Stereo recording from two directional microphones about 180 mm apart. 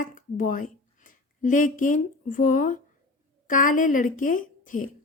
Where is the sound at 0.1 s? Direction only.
50° left (ahead or behind).